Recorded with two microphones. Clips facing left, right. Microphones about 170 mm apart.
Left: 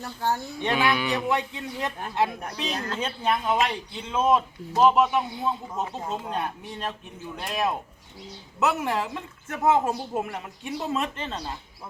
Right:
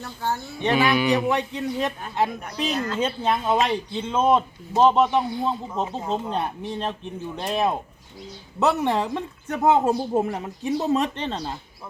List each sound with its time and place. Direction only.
0.6 s a woman's voice: 20° right (ahead or behind)